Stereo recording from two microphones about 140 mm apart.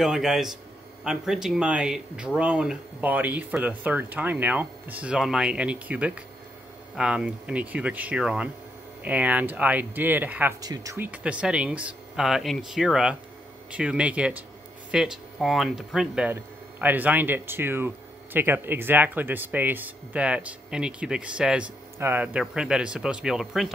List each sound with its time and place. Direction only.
0.0 s speech: 5° right (ahead or behind)
10.6 s speech: 25° right (ahead or behind)
11.0 s speech: 10° right (ahead or behind)
16.3 s speech: 15° right (ahead or behind)